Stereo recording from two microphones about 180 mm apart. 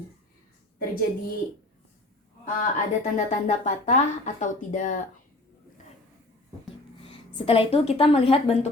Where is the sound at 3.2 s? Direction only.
45° left (ahead or behind).